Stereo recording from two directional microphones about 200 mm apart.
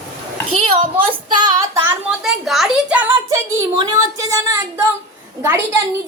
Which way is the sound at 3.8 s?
15° right (ahead or behind).